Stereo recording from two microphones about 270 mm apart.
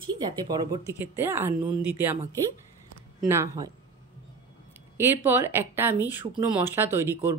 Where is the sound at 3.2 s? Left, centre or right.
Centre.